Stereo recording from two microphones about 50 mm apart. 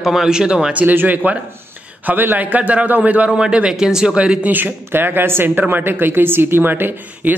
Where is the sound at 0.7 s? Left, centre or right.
Right.